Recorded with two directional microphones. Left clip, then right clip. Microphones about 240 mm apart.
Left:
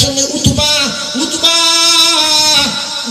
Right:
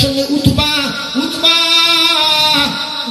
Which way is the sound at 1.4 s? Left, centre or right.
Left.